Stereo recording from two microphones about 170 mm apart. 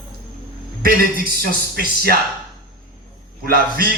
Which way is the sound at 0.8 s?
60° right (ahead or behind).